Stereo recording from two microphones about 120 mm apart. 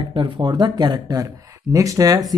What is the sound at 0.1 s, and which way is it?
Speech, 40° right (ahead or behind).